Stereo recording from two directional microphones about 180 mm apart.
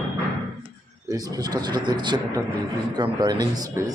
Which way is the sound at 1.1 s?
20° right (ahead or behind).